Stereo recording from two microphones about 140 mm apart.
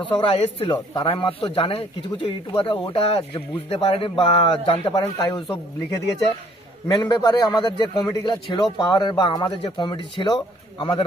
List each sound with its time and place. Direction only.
0.0 s speech: 40° left (ahead or behind)
5.1 s a man's voice: 25° left (ahead or behind)